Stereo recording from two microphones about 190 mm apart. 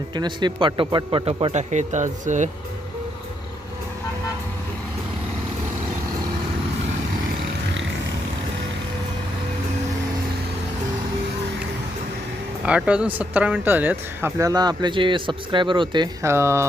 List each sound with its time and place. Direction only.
0.1 s speech: 25° right (ahead or behind); by 2.5 s 40° right (ahead or behind)
12.6 s speech: 5° right (ahead or behind)